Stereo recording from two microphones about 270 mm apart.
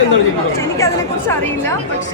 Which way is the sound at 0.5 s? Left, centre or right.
Centre.